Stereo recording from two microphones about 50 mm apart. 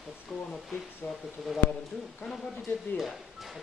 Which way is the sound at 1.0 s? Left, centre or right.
Left.